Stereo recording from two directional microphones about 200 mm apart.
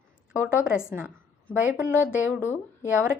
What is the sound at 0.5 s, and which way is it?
A woman's voice, 5° right (ahead or behind).